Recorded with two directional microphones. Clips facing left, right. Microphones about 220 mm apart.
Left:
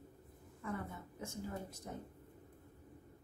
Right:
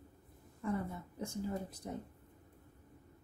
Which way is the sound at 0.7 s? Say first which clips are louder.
Right 5 dB; 35° right (ahead or behind).